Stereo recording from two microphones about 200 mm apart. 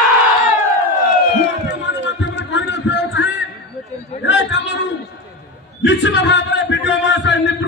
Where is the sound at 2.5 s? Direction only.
65° left (ahead or behind).